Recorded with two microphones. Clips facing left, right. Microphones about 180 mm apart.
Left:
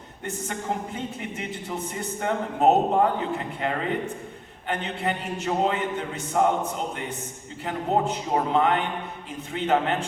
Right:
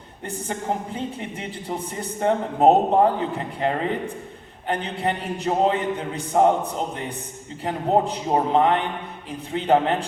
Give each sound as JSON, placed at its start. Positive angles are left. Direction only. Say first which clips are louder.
{"t": 0.9, "sound": "a man's voice", "louder": "right 2 dB", "side_deg": -35}
{"t": 7.6, "sound": "a man's voice", "louder": "right 3 dB", "side_deg": -35}